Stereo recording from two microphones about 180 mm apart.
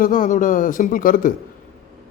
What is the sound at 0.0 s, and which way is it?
A man's voice, 50° left (ahead or behind).